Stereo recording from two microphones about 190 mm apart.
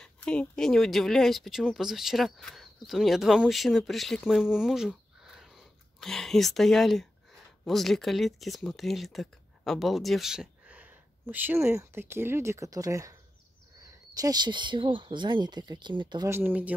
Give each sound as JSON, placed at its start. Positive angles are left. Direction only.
{"t": 0.0, "sound": "speech", "side_deg": 5}